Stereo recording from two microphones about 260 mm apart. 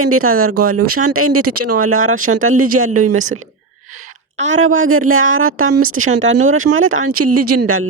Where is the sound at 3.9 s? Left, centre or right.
Right.